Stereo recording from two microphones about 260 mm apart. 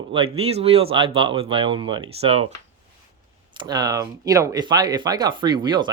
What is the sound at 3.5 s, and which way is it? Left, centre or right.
Speech, centre.